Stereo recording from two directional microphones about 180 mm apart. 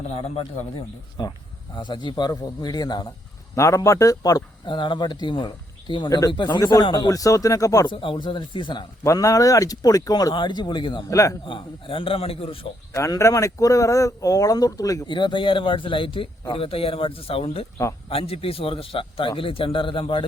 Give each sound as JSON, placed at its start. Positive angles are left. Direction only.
{"t": 1.7, "sound": "a man's voice", "side_deg": 25}
{"t": 11.4, "sound": "a man's voice", "side_deg": 30}
{"t": 12.9, "sound": "a man's voice", "side_deg": 15}